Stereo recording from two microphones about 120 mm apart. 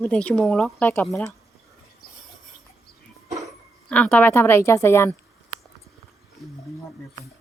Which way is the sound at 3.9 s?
10° left (ahead or behind).